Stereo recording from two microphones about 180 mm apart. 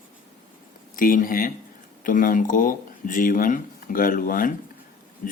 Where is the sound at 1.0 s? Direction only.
50° left (ahead or behind).